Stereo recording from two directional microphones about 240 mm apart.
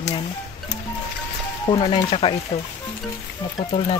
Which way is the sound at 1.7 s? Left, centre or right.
Left.